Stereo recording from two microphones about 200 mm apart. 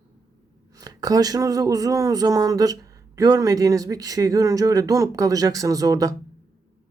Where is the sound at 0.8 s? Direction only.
20° right (ahead or behind).